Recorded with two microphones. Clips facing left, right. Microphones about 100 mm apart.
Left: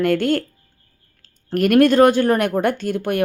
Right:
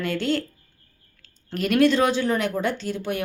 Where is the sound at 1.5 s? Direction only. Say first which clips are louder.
Left 5 dB; 55° left (ahead or behind).